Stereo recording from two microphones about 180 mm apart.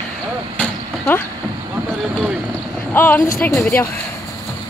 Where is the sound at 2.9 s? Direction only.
10° left (ahead or behind).